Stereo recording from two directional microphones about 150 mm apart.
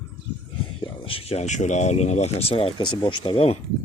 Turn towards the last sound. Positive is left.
turn(degrees=35)  # may be behind; listen again after turning